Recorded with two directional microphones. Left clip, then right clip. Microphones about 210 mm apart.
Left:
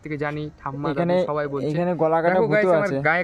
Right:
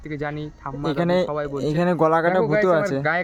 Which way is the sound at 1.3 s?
5° left (ahead or behind).